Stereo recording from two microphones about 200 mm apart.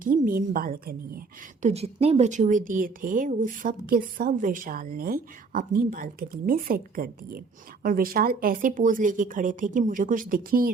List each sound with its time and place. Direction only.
0.0 s a woman's voice: 40° right (ahead or behind)
1.6 s a woman's voice: 30° right (ahead or behind)